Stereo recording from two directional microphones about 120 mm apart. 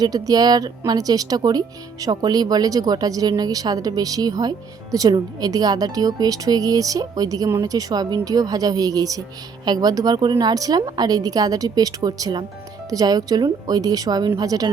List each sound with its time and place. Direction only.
0.0 s speech: 30° right (ahead or behind)